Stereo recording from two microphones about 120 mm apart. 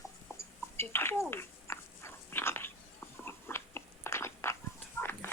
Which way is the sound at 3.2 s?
20° left (ahead or behind).